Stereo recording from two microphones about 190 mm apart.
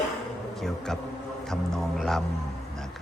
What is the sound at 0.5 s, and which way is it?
Speech, centre (ahead or behind).